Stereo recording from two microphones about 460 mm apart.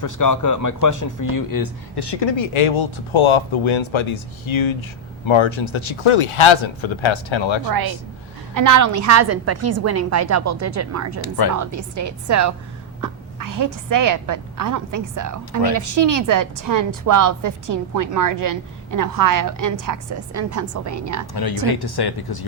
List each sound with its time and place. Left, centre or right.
0.0 s speech: left
8.5 s a woman's voice: right
11.2 s speech: left
11.5 s a woman's voice: right
21.7 s speech: left